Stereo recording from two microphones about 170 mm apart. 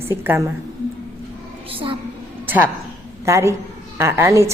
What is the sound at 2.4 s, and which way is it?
A woman's voice, 10° right (ahead or behind).